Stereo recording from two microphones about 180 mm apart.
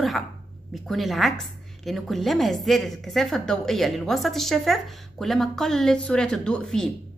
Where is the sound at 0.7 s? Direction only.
Centre (ahead or behind).